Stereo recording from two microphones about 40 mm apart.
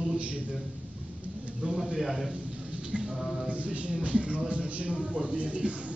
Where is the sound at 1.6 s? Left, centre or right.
Right.